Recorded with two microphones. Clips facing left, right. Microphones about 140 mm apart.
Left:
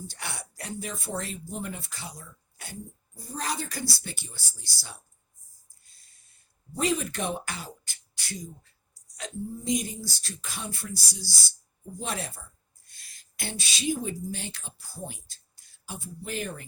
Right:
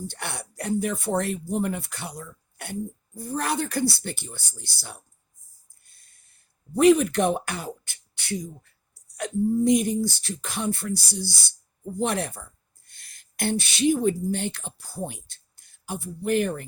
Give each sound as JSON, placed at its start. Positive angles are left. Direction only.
{"t": 0.1, "sound": "speech", "side_deg": -60}
{"t": 5.8, "sound": "a sound", "side_deg": -55}
{"t": 9.1, "sound": "speech", "side_deg": -60}